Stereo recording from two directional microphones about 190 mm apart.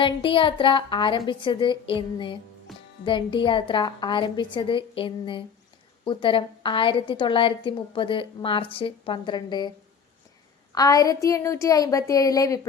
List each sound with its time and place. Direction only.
0.0 s a woman's voice: 25° left (ahead or behind)
10.8 s a woman's voice: 20° left (ahead or behind)